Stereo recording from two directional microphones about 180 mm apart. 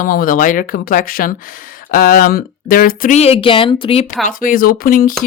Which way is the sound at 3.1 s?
35° left (ahead or behind).